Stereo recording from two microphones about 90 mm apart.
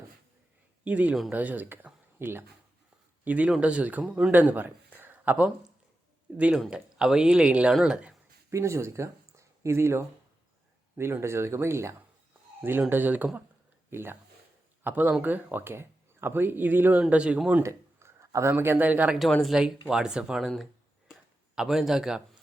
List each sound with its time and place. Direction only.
0.9 s a man's voice: 15° right (ahead or behind)
8.4 s speech: 35° right (ahead or behind); by 17.6 s 10° right (ahead or behind)
17.6 s a sound: 30° right (ahead or behind)
18.5 s speech: 25° right (ahead or behind)
19.3 s speech: centre (ahead or behind)
21.1 s a sound: 5° right (ahead or behind)